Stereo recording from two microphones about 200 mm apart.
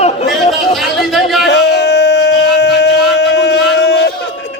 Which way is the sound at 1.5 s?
60° left (ahead or behind).